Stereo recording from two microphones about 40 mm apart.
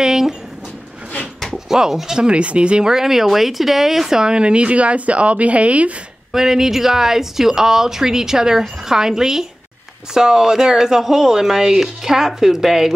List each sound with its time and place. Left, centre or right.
0.0 s speech: centre
1.7 s speech: centre
2.1 s speech: right
2.9 s speech: centre; by 5.9 s right
6.3 s speech: centre